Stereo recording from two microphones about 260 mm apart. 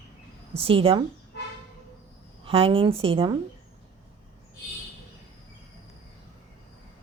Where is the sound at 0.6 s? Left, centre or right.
Right.